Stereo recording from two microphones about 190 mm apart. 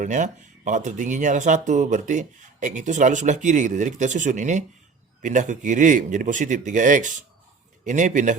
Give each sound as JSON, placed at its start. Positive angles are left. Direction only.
{"t": 0.0, "sound": "speech", "side_deg": -40}